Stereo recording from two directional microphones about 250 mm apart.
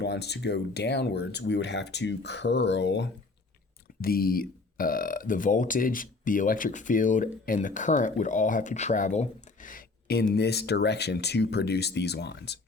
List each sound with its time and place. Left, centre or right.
0.0 s speech: left